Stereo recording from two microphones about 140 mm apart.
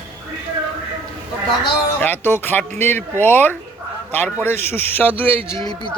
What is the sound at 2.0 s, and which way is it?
Speech, 15° left (ahead or behind).